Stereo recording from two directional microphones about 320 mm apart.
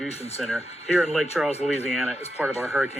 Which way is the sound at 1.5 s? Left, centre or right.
Centre.